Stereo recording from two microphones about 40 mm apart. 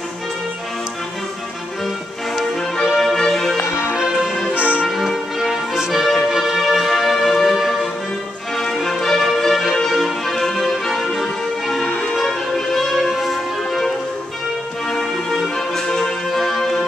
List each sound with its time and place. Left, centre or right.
2.8 s music: centre
3.9 s music: centre
4.6 s music: right
4.8 s music: centre
11.9 s music: left
12.2 s music: centre